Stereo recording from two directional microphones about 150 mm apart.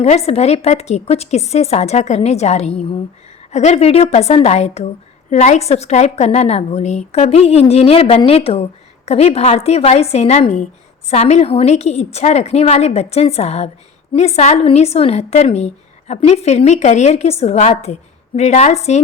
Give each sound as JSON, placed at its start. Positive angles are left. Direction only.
{"t": 0.0, "sound": "a woman's voice", "side_deg": 45}